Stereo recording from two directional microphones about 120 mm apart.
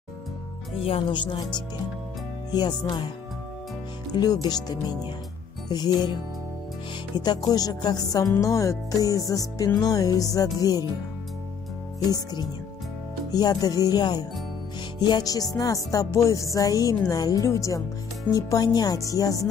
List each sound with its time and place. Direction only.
0.8 s speech: 45° left (ahead or behind)
2.5 s music: 35° left (ahead or behind)
4.1 s music: 35° left (ahead or behind)
7.2 s music: 35° left (ahead or behind)
13.3 s music: 35° left (ahead or behind)